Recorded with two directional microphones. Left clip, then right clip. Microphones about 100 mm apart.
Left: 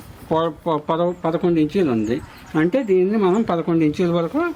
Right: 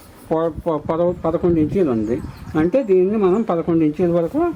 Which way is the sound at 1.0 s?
25° left (ahead or behind).